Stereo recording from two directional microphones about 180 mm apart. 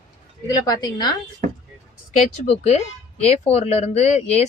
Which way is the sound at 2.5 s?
35° left (ahead or behind).